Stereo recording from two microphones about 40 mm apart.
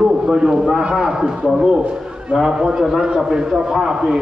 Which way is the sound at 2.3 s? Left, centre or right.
Centre.